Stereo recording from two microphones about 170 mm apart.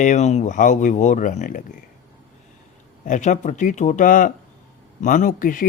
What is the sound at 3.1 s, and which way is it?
A man's voice, 45° left (ahead or behind).